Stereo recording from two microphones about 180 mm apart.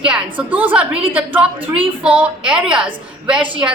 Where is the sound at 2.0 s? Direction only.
5° right (ahead or behind).